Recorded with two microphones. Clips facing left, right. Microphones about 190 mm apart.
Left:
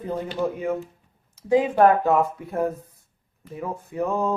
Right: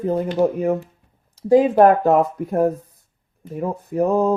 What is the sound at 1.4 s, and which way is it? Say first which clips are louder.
Speech: right 5 dB; 35° right (ahead or behind).